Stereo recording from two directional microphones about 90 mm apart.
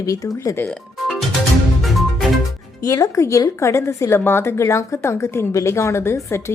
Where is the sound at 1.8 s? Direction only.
Centre (ahead or behind).